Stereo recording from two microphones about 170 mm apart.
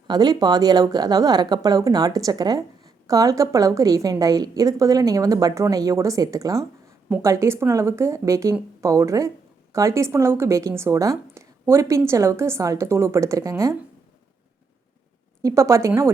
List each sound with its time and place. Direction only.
0.1 s a woman's voice: 25° right (ahead or behind)
15.4 s a woman's voice: 20° right (ahead or behind)